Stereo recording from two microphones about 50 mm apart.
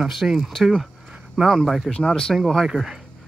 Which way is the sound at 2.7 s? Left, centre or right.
Centre.